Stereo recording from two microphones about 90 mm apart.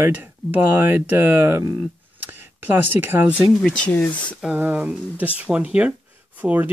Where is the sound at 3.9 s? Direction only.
15° left (ahead or behind).